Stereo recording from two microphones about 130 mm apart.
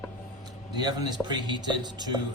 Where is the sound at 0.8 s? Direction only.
35° right (ahead or behind).